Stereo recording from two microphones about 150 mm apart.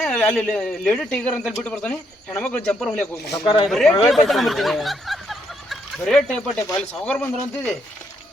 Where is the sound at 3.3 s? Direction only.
30° left (ahead or behind).